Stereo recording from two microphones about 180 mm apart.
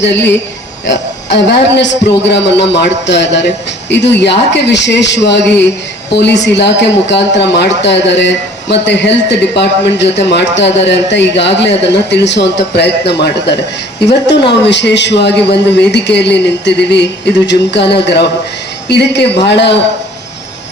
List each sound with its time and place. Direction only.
0.0 s a man's voice: 75° left (ahead or behind)